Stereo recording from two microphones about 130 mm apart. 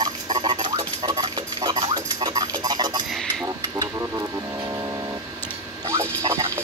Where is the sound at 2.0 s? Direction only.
30° right (ahead or behind).